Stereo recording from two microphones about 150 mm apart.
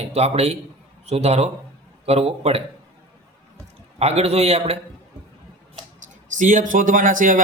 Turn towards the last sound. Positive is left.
turn(degrees=-60)  # may be behind; listen again after turning